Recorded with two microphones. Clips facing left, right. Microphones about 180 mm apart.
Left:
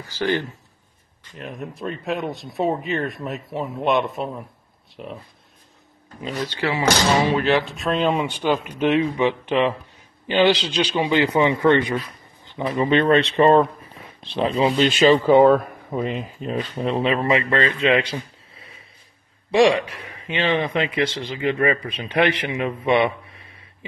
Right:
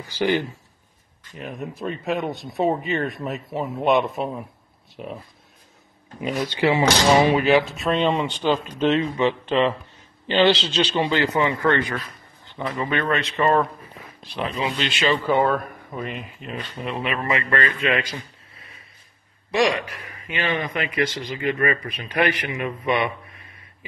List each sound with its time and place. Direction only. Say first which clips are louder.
0.0 s speech: right 1 dB; 15° right (ahead or behind)
1.3 s speech: right 1 dB; centre (ahead or behind)
6.2 s speech: right 4 dB; 15° right (ahead or behind); by 15.1 s 45° left (ahead or behind)
15.1 s speech: left 6 dB; 25° left (ahead or behind)
19.9 s speech: left 3 dB; 30° left (ahead or behind)